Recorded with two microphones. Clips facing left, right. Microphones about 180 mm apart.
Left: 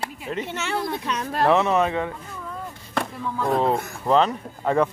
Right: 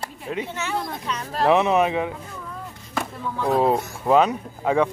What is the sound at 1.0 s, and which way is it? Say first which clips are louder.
Speech: left 2 dB; 60° left (ahead or behind).